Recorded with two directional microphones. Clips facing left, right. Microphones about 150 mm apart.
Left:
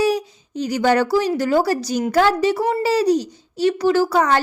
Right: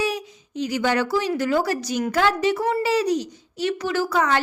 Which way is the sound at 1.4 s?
35° left (ahead or behind).